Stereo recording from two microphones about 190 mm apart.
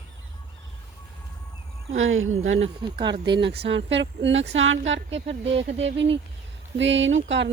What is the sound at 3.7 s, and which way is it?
Speech, 70° right (ahead or behind).